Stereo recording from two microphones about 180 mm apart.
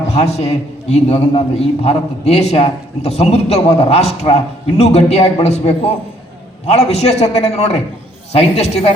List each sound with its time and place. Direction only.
0.1 s a man's voice: 35° left (ahead or behind)